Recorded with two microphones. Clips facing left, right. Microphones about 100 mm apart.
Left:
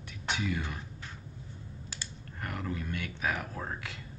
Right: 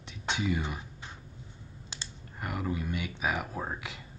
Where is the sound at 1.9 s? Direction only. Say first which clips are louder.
Right 3 dB; 15° right (ahead or behind).